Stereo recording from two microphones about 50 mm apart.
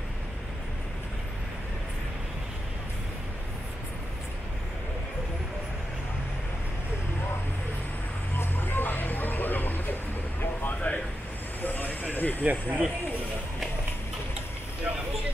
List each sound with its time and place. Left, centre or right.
8.4 s music: left
10.9 s a sound: left
11.6 s vehicle: left
12.4 s speech: right